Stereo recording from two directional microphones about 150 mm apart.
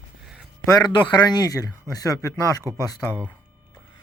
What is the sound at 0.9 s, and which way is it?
Speech, 30° left (ahead or behind).